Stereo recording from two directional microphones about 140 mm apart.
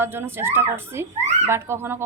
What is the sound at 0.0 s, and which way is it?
A woman's voice, 15° right (ahead or behind).